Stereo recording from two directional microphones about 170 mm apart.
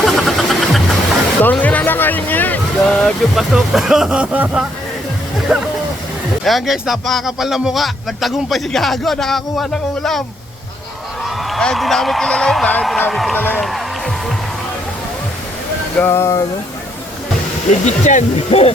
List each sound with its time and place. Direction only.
0.0 s vehicle: centre (ahead or behind)
1.4 s a man's voice: 10° left (ahead or behind)
13.6 s music: centre (ahead or behind)
16.0 s speech: 15° left (ahead or behind)
17.8 s speech: 45° left (ahead or behind)